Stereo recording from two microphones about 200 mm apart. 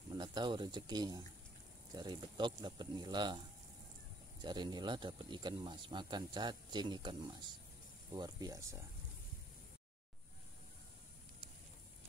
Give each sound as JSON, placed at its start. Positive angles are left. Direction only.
{"t": 0.1, "sound": "speech", "side_deg": -20}
{"t": 4.4, "sound": "speech", "side_deg": -20}